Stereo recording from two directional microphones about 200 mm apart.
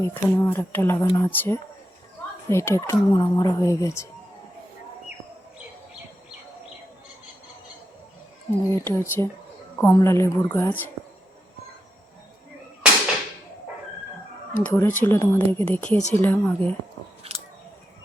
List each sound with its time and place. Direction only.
0.0 s speech: 10° left (ahead or behind)
8.7 s speech: 10° left (ahead or behind)
14.6 s speech: 10° left (ahead or behind)
17.2 s scissors: 30° right (ahead or behind)